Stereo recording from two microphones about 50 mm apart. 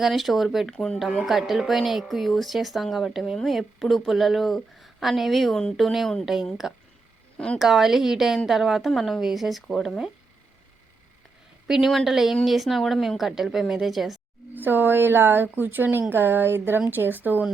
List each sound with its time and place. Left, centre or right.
0.0 s speech: centre
0.7 s speech: centre
0.9 s a woman's voice: centre
7.3 s speech: left
7.6 s a woman's voice: centre
12.0 s speech: centre
14.5 s speech: right